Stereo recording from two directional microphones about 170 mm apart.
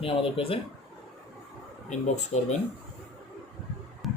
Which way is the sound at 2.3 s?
40° left (ahead or behind).